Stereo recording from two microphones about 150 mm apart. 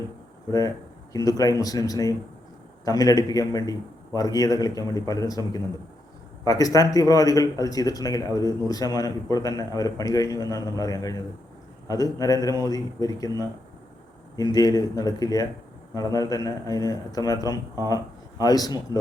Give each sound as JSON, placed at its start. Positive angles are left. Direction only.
{"t": 0.5, "sound": "speech", "side_deg": 25}
{"t": 14.5, "sound": "speech", "side_deg": 25}